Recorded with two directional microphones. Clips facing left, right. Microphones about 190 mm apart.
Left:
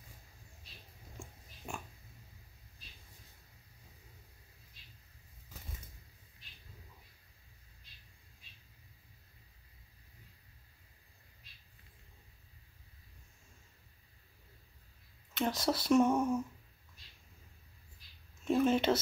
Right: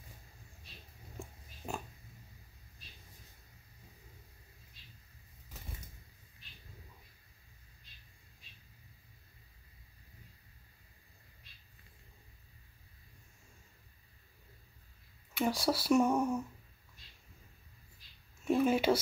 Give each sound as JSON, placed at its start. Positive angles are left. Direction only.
{"t": 1.7, "sound": "pig", "side_deg": -40}
{"t": 15.3, "sound": "speech", "side_deg": -10}
{"t": 18.4, "sound": "a sound", "side_deg": -10}